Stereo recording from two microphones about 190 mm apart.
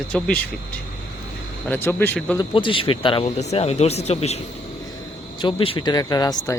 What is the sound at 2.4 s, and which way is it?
Speech, 25° left (ahead or behind).